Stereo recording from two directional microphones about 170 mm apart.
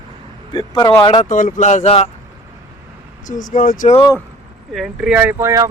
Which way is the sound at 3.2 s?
50° left (ahead or behind).